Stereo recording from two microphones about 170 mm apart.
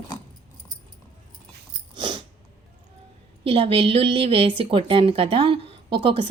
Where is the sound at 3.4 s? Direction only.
35° right (ahead or behind).